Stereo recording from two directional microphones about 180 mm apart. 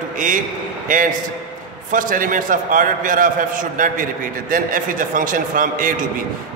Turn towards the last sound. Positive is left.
turn(degrees=-50)  # may be behind; listen again after turning